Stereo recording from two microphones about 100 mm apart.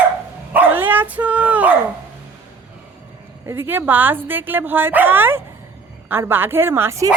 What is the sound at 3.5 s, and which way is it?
Speech, 20° right (ahead or behind).